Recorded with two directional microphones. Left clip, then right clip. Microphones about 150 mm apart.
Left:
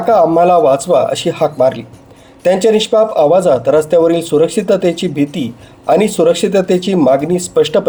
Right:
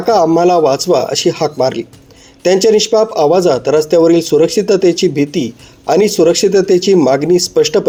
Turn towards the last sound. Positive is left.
turn(degrees=-35)  # may be behind; listen again after turning